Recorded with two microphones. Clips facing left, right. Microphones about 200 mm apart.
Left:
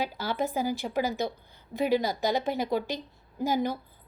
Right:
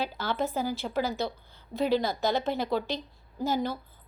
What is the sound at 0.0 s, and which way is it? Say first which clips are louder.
A woman's voice: even; 10° left (ahead or behind).